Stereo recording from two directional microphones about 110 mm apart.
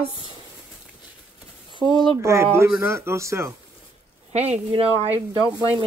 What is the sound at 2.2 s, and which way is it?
Speech, 25° right (ahead or behind).